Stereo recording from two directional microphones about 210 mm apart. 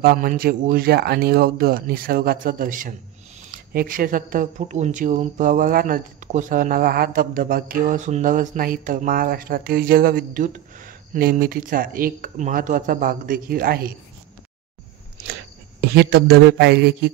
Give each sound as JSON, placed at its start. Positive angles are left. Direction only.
{"t": 0.0, "sound": "a man's voice", "side_deg": -45}
{"t": 15.8, "sound": "a man's voice", "side_deg": -50}